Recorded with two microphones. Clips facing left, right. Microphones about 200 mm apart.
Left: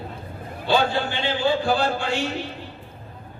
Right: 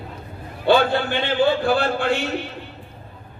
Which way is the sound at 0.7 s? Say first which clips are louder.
Right 4 dB; 55° right (ahead or behind).